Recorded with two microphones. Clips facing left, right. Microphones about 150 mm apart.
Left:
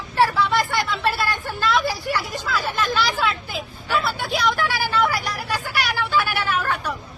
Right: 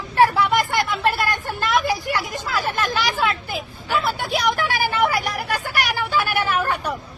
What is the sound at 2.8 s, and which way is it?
Speech, 45° right (ahead or behind).